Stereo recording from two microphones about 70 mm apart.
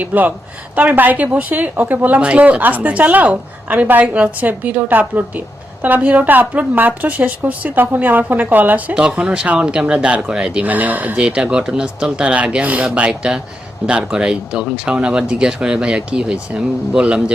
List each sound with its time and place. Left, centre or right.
0.0 s a woman's voice: right